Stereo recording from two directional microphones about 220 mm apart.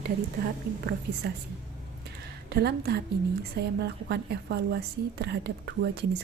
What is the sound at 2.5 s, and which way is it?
A woman's voice, 45° right (ahead or behind).